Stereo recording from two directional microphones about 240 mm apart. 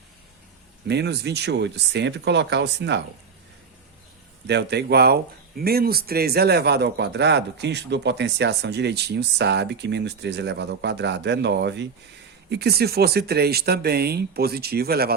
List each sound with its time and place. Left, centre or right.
0.9 s speech: right
4.4 s speech: right